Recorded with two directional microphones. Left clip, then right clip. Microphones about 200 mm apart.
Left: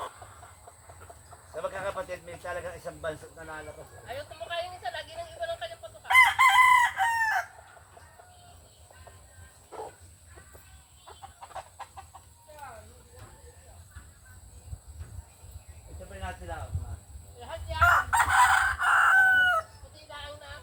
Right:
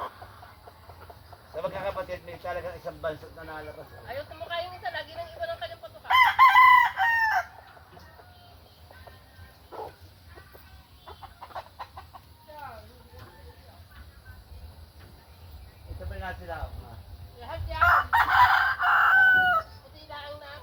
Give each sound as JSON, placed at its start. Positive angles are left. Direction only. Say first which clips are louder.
{"t": 1.5, "sound": "speech", "louder": "right 2 dB", "side_deg": 10}
{"t": 4.0, "sound": "speech", "louder": "right 2 dB", "side_deg": 40}
{"t": 6.1, "sound": "chicken", "louder": "right 1 dB", "side_deg": 20}
{"t": 11.0, "sound": "chicken", "louder": "right 2 dB", "side_deg": 20}
{"t": 17.4, "sound": "crowing", "louder": "even", "side_deg": 35}
{"t": 20.1, "sound": "a sound", "louder": "right 3 dB", "side_deg": 35}